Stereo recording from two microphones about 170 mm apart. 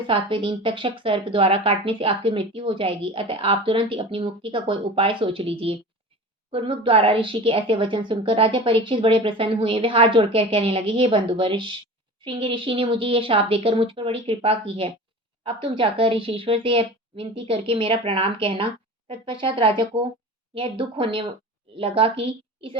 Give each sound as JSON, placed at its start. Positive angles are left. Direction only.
{"t": 0.1, "sound": "a woman's voice", "side_deg": -30}